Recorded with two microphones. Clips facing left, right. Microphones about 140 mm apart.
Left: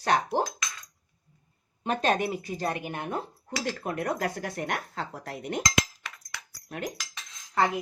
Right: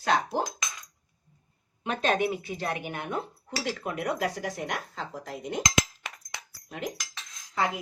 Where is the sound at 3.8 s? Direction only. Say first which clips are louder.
Even; 55° left (ahead or behind).